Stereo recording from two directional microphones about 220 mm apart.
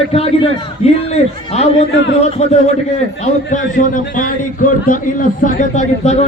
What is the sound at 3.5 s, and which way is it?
Speech, 35° left (ahead or behind).